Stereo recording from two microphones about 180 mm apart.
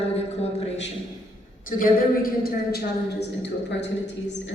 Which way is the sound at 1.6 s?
50° left (ahead or behind).